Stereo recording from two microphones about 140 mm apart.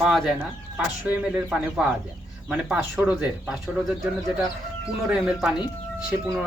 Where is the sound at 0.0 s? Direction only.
Centre (ahead or behind).